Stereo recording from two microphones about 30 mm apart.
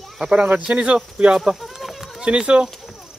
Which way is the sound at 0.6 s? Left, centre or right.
Right.